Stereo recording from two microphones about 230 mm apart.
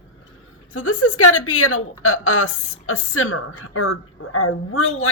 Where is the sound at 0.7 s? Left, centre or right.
Left.